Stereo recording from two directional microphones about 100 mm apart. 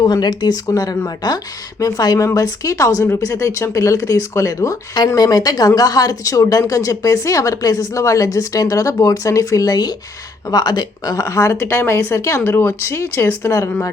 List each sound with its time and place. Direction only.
0.0 s speech: 45° left (ahead or behind); by 13.7 s 25° left (ahead or behind)